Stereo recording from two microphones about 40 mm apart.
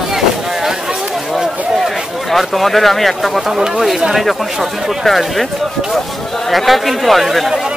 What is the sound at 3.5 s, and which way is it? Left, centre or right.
Speech, centre.